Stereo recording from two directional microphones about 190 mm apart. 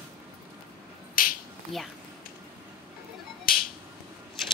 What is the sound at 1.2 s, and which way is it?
Finger snapping, 50° left (ahead or behind).